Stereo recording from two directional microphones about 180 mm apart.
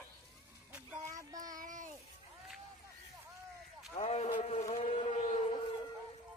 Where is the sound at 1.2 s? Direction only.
20° right (ahead or behind).